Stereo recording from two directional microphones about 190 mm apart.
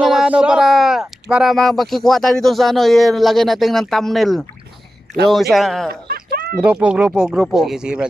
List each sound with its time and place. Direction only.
0.0 s speech: 5° right (ahead or behind)
5.9 s a sound: 55° right (ahead or behind)
6.6 s speech: 5° right (ahead or behind)